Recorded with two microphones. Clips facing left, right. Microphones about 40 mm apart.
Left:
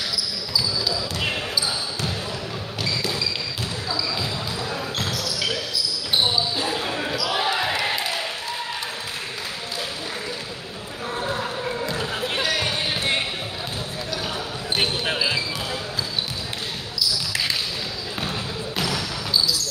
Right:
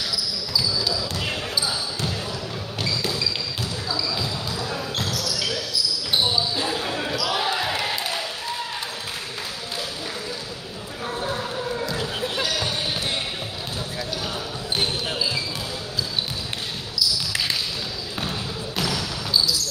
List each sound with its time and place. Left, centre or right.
5.1 s basketball bounce: centre
7.3 s basketball bounce: centre
11.2 s a sound: centre
12.4 s basketball bounce: left